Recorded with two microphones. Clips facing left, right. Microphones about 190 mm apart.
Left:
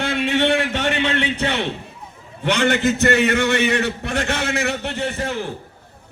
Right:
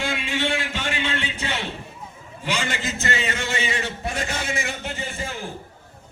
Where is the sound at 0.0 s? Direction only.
65° left (ahead or behind).